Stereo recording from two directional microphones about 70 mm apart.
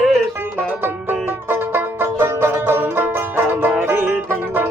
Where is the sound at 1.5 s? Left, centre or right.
Right.